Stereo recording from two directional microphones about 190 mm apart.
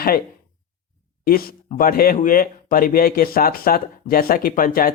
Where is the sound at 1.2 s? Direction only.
50° left (ahead or behind).